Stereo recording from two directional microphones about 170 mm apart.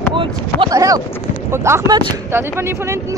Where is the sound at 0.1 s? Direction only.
30° right (ahead or behind).